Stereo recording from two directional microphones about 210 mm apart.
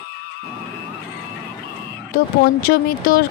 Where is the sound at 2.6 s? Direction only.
45° left (ahead or behind).